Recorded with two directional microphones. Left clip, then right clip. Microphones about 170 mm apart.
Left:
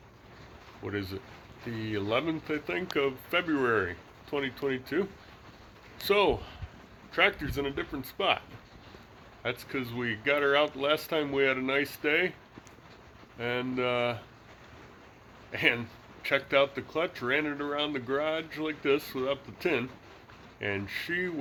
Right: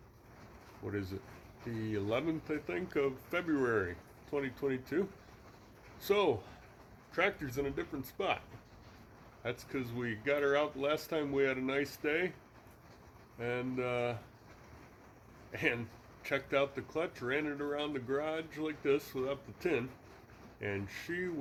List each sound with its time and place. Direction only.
0.9 s speech: 15° left (ahead or behind)
13.4 s speech: 20° left (ahead or behind)
15.5 s speech: 20° left (ahead or behind)